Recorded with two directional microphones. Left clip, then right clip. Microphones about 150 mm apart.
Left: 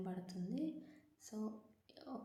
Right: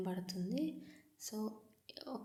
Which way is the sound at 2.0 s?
15° right (ahead or behind).